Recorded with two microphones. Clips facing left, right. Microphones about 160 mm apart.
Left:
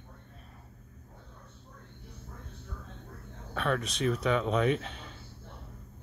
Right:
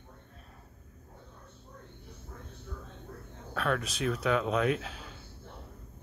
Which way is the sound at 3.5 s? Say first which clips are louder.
Even; centre (ahead or behind).